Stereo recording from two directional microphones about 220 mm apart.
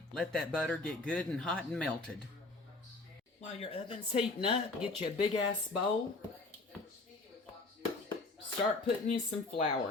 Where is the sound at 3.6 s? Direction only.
25° left (ahead or behind).